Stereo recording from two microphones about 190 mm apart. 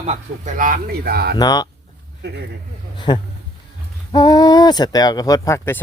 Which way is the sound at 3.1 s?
25° left (ahead or behind).